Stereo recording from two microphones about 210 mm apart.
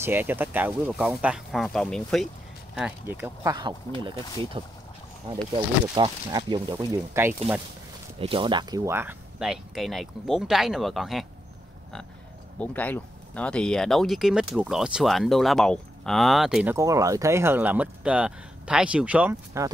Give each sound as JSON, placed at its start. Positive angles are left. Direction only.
{"t": 0.0, "sound": "speech", "side_deg": -10}
{"t": 3.5, "sound": "speech", "side_deg": -20}
{"t": 5.9, "sound": "speech", "side_deg": -20}
{"t": 8.2, "sound": "speech", "side_deg": -25}
{"t": 12.5, "sound": "speech", "side_deg": 10}
{"t": 16.7, "sound": "speech", "side_deg": -15}